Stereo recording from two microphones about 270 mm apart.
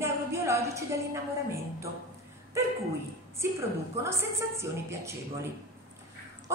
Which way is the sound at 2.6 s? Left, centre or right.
Centre.